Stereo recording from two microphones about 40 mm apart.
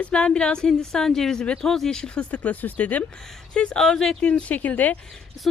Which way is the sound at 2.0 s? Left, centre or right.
Left.